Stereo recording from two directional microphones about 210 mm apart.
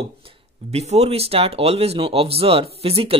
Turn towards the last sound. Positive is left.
turn(degrees=-25)  # may be behind; listen again after turning